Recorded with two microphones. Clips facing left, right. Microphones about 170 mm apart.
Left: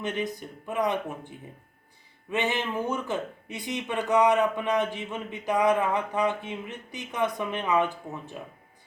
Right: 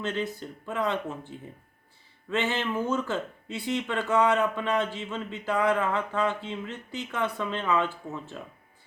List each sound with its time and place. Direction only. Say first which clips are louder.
0.0 s speech: even; 15° left (ahead or behind)
2.3 s speech: even; 15° left (ahead or behind)